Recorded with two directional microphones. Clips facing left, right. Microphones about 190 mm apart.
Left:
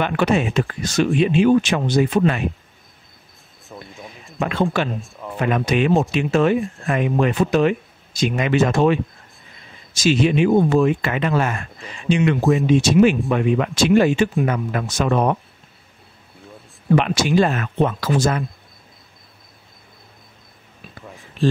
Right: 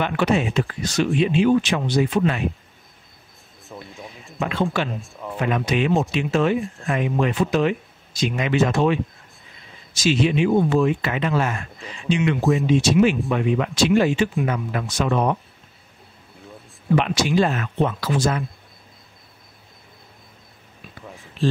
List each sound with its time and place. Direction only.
0.0 s speech: 55° left (ahead or behind)
3.6 s speech: centre (ahead or behind)
4.4 s speech: 50° left (ahead or behind)
5.0 s speech: centre (ahead or behind)
5.4 s speech: 50° left (ahead or behind)
16.9 s speech: 50° left (ahead or behind)